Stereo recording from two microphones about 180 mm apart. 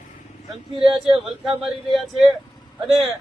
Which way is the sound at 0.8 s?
30° right (ahead or behind).